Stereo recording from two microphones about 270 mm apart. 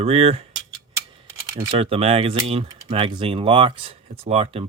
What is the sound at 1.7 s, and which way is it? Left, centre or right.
Speech, right.